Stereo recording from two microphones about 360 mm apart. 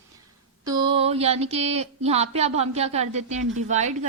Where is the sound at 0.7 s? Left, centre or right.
Centre.